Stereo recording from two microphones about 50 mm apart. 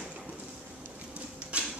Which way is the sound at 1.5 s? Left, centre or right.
Right.